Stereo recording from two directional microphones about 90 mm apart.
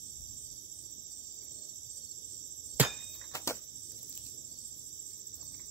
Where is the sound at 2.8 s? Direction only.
20° right (ahead or behind).